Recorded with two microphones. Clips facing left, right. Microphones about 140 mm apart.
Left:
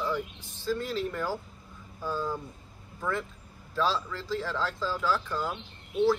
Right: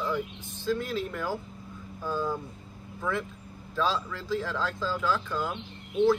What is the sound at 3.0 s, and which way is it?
Speech, centre (ahead or behind).